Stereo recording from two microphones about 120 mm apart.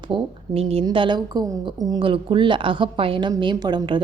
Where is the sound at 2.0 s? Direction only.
45° right (ahead or behind).